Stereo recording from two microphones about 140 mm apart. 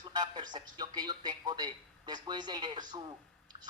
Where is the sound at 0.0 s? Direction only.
30° right (ahead or behind).